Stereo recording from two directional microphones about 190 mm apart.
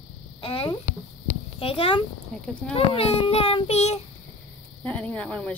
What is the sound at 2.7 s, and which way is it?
Child singing, 30° left (ahead or behind).